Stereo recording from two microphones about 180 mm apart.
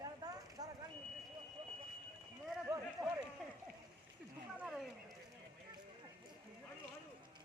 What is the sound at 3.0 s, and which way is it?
Run, 20° right (ahead or behind).